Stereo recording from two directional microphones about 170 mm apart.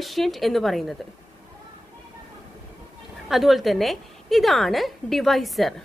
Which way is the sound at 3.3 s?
Centre (ahead or behind).